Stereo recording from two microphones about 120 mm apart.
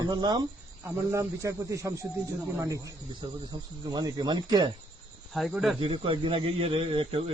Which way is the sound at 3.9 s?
35° right (ahead or behind).